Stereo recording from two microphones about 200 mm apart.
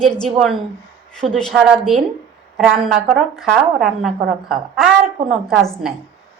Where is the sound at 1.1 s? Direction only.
Centre (ahead or behind).